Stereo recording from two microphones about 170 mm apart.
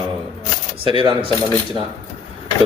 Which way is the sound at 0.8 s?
30° right (ahead or behind).